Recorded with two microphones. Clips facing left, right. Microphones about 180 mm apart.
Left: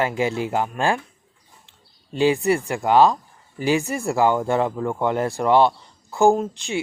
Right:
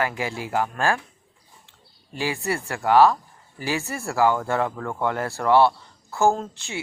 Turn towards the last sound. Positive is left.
turn(degrees=15)  # may be behind; listen again after turning